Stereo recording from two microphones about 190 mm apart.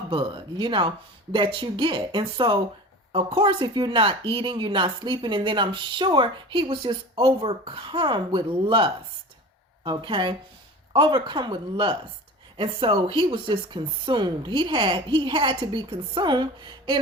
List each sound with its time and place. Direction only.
0.1 s a woman's voice: 25° right (ahead or behind)